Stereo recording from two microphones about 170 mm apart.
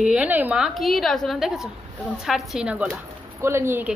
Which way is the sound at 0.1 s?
10° right (ahead or behind).